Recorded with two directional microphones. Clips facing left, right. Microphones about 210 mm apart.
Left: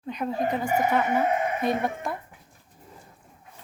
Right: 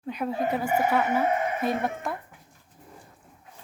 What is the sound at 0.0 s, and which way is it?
Speech, 5° right (ahead or behind).